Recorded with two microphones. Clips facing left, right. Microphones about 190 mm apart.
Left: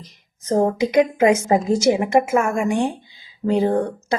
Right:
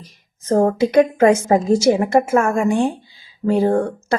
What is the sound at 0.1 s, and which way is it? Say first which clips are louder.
A woman's voice: right 3 dB; 15° left (ahead or behind).